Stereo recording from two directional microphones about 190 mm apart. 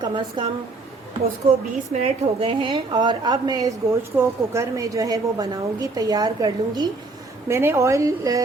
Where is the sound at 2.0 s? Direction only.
30° right (ahead or behind).